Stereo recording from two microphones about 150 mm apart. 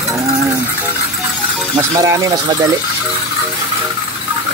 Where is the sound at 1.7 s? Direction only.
20° right (ahead or behind).